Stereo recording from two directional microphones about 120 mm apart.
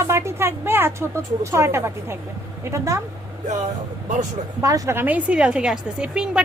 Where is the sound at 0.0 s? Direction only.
20° right (ahead or behind).